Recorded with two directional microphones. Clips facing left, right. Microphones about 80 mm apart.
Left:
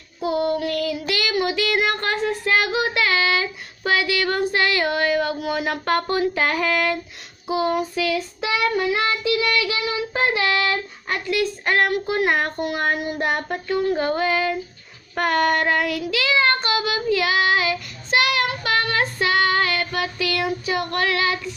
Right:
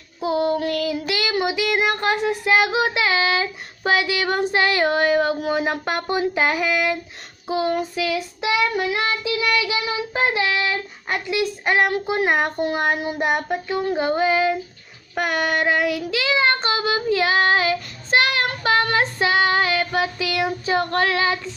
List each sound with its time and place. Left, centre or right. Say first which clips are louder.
0.2 s child singing: right 1 dB; right
7.4 s child singing: even; right; by 13.7 s centre
13.8 s child singing: right 3 dB; right